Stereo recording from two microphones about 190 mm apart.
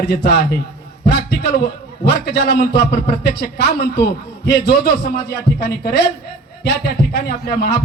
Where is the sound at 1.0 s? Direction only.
60° left (ahead or behind).